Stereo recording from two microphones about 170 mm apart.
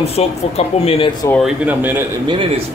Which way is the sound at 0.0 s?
40° left (ahead or behind).